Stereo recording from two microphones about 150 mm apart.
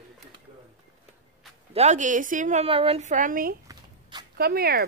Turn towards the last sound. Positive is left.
turn(degrees=-90)